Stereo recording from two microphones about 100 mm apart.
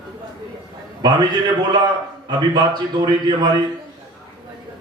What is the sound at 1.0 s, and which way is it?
Speech, 45° right (ahead or behind).